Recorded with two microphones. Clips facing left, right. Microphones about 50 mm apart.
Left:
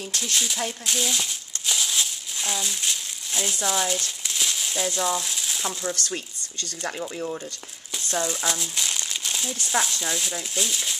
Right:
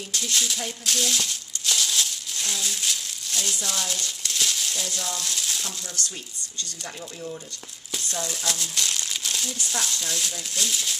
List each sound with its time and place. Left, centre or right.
0.1 s speech: centre
0.8 s crumpling: centre
3.6 s speech: centre
6.8 s speech: left
8.5 s speech: centre